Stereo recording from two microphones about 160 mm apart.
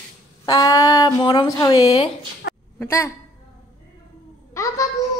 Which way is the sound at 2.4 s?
90° left.